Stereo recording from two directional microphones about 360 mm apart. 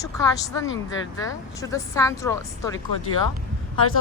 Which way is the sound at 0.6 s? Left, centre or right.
Left.